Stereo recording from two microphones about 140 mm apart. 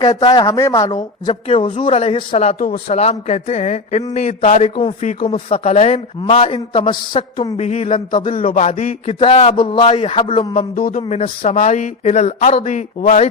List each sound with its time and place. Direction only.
0.0 s speech: 30° left (ahead or behind)
1.3 s a man's voice: 40° left (ahead or behind)
7.5 s speech: 55° left (ahead or behind)
7.9 s a man's voice: 40° left (ahead or behind)
10.8 s a man's voice: 90° left
11.1 s speech: 60° left (ahead or behind)